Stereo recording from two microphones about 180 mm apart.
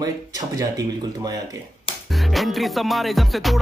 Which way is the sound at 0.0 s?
20° right (ahead or behind).